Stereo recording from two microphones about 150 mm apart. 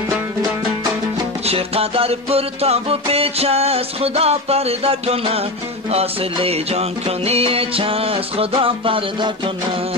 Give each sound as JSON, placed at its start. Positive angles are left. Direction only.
{"t": 1.4, "sound": "music", "side_deg": -40}